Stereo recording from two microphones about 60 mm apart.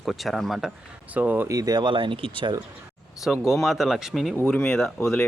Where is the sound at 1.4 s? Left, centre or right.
Right.